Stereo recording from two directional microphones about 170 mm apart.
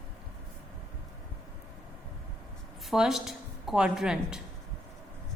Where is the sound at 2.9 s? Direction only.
Centre (ahead or behind).